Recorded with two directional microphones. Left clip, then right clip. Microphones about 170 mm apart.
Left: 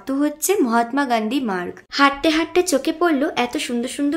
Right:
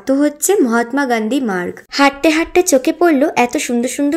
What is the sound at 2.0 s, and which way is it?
Speech, 30° right (ahead or behind).